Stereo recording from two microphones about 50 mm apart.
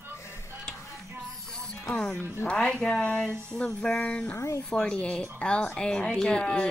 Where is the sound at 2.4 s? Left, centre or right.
Centre.